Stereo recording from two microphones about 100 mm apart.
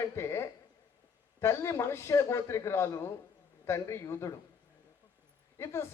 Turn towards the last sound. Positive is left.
turn(degrees=25)  # may be behind; listen again after turning